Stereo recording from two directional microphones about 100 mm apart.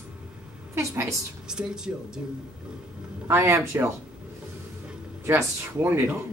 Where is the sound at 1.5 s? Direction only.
5° right (ahead or behind).